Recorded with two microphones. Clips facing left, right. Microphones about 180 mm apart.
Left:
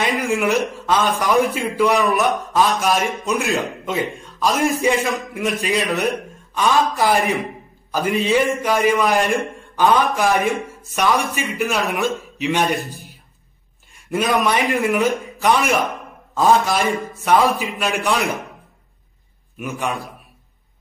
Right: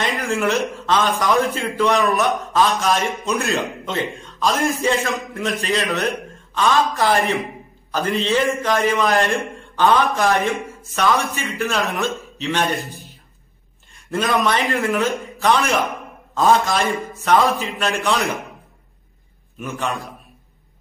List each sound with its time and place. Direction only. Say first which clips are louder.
0.0 s a sound: left 2 dB; 10° left (ahead or behind)
0.7 s a man's voice: even; 5° left (ahead or behind)
14.1 s a man's voice: left 1 dB; 10° left (ahead or behind)
17.2 s a man's voice: even; 10° left (ahead or behind)
19.6 s a man's voice: left 1 dB; 10° left (ahead or behind)